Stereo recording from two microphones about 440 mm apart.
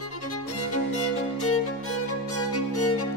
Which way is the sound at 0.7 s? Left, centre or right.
Left.